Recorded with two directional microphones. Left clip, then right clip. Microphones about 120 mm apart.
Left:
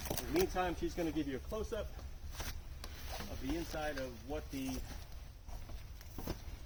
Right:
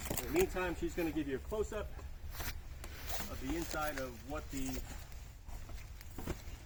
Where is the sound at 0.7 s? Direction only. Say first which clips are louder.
Even; 15° left (ahead or behind).